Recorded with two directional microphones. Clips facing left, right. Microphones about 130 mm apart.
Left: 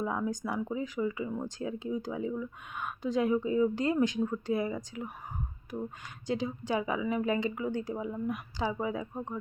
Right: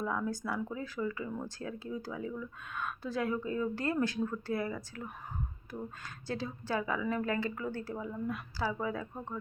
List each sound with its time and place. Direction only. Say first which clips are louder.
0.0 s speech: left 2 dB; 20° left (ahead or behind)
6.2 s a woman's voice: left 5 dB; 15° left (ahead or behind)